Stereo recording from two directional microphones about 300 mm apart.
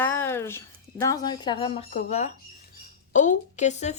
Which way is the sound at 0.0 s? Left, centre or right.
Centre.